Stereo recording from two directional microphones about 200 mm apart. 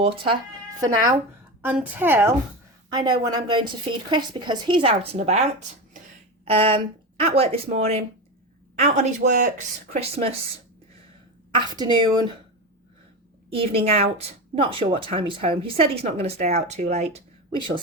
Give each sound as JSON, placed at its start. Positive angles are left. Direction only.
{"t": 1.6, "sound": "a woman's voice", "side_deg": -10}
{"t": 11.5, "sound": "a woman's voice", "side_deg": -20}
{"t": 13.5, "sound": "a woman's voice", "side_deg": -30}